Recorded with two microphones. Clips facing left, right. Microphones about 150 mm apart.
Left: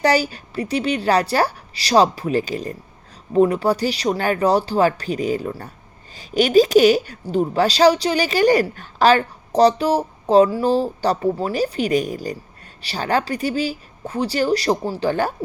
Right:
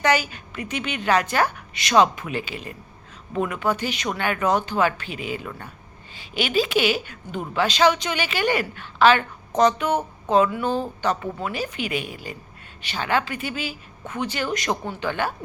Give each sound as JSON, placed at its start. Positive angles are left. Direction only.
{"t": 0.0, "sound": "a woman's voice", "side_deg": 35}